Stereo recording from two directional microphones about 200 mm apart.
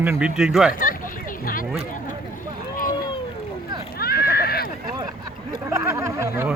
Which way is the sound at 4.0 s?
50° left (ahead or behind).